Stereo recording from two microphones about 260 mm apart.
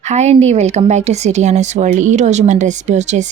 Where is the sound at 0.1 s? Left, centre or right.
Right.